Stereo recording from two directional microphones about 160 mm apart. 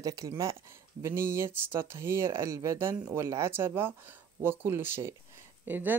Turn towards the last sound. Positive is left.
turn(degrees=-10)  # may be behind; listen again after turning